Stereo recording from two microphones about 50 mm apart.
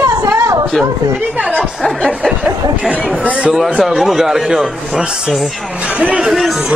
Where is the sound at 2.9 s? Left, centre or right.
Right.